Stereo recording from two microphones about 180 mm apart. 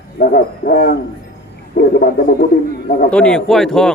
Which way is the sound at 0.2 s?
55° left (ahead or behind).